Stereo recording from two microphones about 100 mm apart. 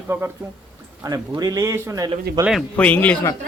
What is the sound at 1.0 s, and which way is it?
Speech, 40° right (ahead or behind).